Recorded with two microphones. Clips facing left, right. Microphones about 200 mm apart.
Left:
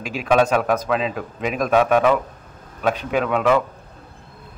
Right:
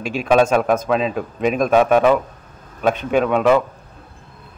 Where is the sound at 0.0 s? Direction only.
30° right (ahead or behind).